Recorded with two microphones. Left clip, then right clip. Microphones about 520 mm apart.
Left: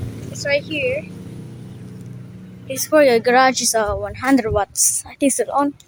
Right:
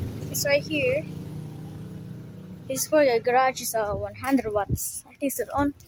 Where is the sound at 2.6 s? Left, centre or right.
Right.